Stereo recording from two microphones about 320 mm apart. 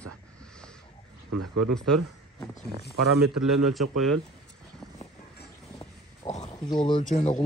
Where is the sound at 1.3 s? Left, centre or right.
Right.